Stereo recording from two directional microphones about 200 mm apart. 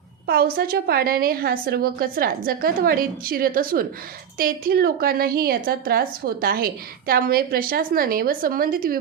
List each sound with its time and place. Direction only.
0.3 s a woman's voice: 50° right (ahead or behind)